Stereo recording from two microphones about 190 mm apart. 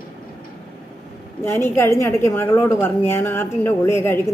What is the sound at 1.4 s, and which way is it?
A woman's voice, 15° left (ahead or behind).